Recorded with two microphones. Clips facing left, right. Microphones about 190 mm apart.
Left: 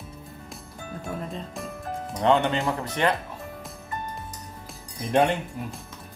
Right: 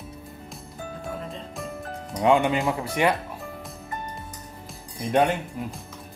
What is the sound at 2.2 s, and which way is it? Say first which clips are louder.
Speech: right 2 dB; 10° right (ahead or behind).